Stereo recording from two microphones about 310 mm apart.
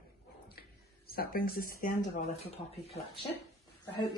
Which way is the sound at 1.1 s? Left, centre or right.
Left.